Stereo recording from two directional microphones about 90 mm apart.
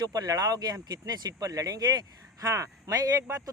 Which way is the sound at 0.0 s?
45° right (ahead or behind).